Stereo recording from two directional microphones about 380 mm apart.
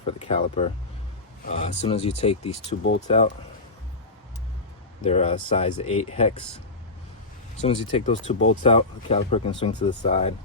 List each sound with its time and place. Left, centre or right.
0.0 s speech: centre
5.0 s speech: centre
7.6 s speech: centre